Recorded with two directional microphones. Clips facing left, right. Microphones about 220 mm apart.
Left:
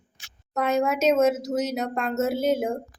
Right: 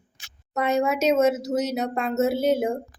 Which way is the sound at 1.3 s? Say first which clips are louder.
Right 1 dB; 10° right (ahead or behind).